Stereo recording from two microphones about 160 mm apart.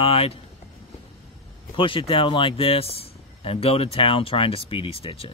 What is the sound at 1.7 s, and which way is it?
Speech, 35° left (ahead or behind).